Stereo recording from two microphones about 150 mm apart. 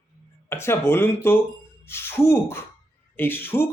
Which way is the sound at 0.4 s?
15° left (ahead or behind).